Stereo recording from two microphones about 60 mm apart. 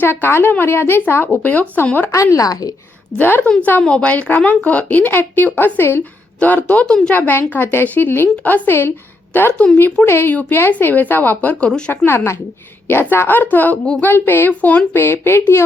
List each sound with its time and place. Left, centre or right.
0.0 s a woman's voice: left
2.1 s speech: left
3.2 s a woman's voice: left
3.6 s speech: left
6.8 s a woman's voice: centre
7.1 s a woman's voice: left
14.9 s a woman's voice: left